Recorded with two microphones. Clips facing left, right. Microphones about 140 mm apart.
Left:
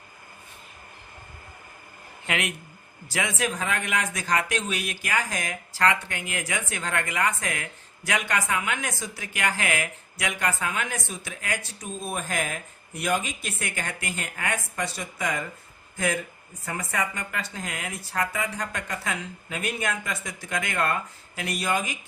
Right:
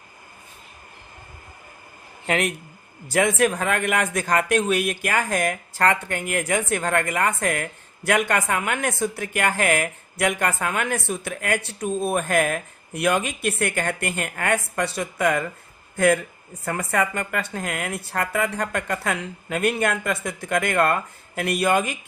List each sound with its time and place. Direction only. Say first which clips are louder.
2.2 s a man's voice: right 6 dB; 40° right (ahead or behind)
3.1 s speech: right 8 dB; 50° right (ahead or behind)
16.6 s speech: right 6 dB; 60° right (ahead or behind)